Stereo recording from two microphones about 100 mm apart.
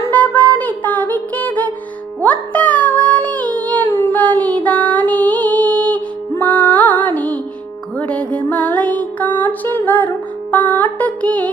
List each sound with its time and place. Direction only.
0.0 s music: 15° left (ahead or behind)